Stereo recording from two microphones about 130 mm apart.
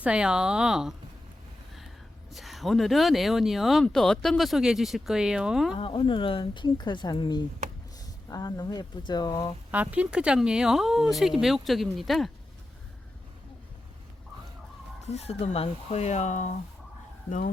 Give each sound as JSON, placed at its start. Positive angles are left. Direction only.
{"t": 0.0, "sound": "speech", "side_deg": -10}
{"t": 2.3, "sound": "speech", "side_deg": 0}
{"t": 5.7, "sound": "speech", "side_deg": 40}
{"t": 9.7, "sound": "speech", "side_deg": -10}
{"t": 15.0, "sound": "speech", "side_deg": 55}